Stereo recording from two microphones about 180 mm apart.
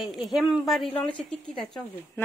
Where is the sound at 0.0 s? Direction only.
Centre (ahead or behind).